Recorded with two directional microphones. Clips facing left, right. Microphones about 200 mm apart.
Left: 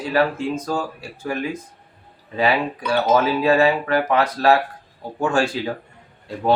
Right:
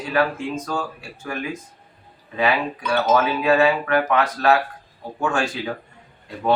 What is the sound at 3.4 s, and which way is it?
Speech, 30° left (ahead or behind).